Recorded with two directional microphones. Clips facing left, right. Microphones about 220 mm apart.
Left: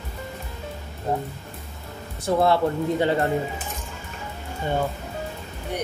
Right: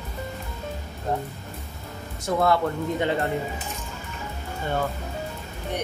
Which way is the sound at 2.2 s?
30° left (ahead or behind).